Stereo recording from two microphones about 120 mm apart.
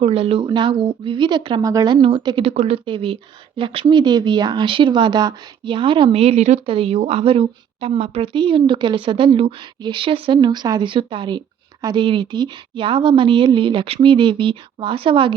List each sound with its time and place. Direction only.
0.0 s a woman's voice: 55° right (ahead or behind)
0.4 s speech: 40° right (ahead or behind)
2.2 s a woman's voice: 50° right (ahead or behind); by 6.6 s 70° right (ahead or behind)
6.7 s a woman's voice: 50° right (ahead or behind)